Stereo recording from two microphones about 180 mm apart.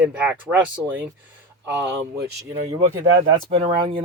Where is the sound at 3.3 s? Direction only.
30° right (ahead or behind).